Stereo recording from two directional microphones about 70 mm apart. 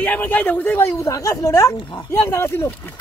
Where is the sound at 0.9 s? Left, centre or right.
Left.